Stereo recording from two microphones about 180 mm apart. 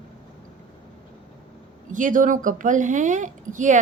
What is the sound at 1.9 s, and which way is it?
A woman's voice, 45° right (ahead or behind).